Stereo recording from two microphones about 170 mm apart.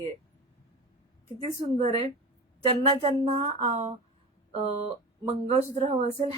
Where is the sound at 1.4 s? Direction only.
40° right (ahead or behind).